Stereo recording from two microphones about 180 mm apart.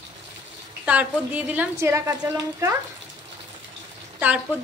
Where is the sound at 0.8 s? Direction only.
10° right (ahead or behind).